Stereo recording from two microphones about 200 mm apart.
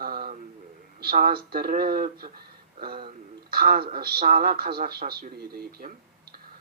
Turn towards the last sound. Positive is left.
turn(degrees=-50)  # may be behind; listen again after turning